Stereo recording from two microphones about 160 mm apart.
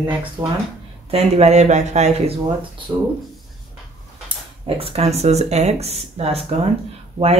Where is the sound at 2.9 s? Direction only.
20° right (ahead or behind).